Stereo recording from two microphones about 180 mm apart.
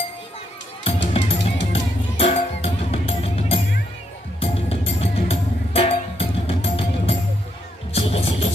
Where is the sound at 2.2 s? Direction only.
35° left (ahead or behind).